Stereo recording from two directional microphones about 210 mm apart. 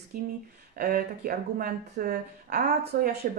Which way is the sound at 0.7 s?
45° right (ahead or behind).